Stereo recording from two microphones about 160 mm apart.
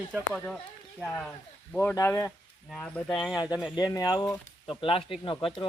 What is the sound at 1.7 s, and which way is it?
Speech, 15° left (ahead or behind).